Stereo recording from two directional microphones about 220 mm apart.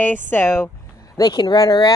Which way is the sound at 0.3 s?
10° left (ahead or behind).